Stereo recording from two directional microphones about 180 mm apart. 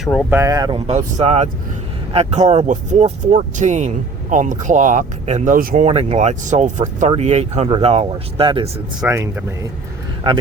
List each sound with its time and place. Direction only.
0.0 s speech: 5° left (ahead or behind)
0.3 s speech: 15° right (ahead or behind)
0.9 s speech: 35° right (ahead or behind)
5.9 s speech: 35° right (ahead or behind)
9.0 s speech: 15° right (ahead or behind)
10.3 s speech: 30° right (ahead or behind)